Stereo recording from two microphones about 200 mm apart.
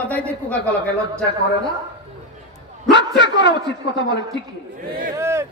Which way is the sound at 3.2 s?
60° left (ahead or behind).